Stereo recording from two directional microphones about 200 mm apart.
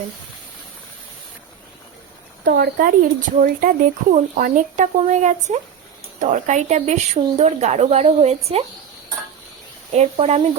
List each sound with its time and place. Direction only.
2.4 s speech: 50° right (ahead or behind); by 8.6 s 30° right (ahead or behind)
9.9 s speech: 35° right (ahead or behind)